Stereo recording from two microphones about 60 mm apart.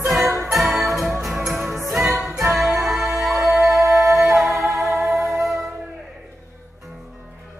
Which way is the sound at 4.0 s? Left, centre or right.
Right.